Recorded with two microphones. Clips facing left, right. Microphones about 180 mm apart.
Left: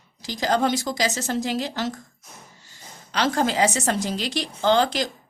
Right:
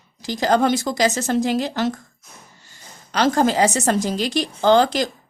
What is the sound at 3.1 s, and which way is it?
A woman's voice, 45° right (ahead or behind).